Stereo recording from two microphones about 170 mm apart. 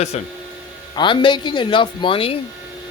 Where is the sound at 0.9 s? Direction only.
30° left (ahead or behind).